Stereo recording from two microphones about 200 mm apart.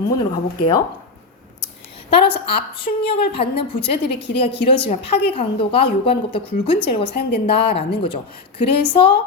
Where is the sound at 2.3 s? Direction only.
50° left (ahead or behind).